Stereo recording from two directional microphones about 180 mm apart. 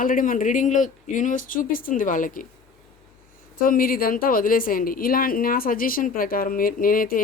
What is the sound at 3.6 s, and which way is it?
A woman's voice, 55° left (ahead or behind).